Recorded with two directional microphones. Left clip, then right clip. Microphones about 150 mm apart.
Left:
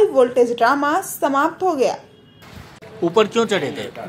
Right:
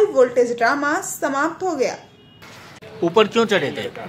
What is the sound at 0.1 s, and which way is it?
Speech, 15° left (ahead or behind).